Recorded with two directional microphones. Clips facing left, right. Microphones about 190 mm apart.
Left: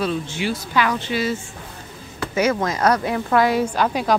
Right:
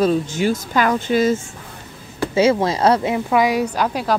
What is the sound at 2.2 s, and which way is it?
Speech, 25° right (ahead or behind).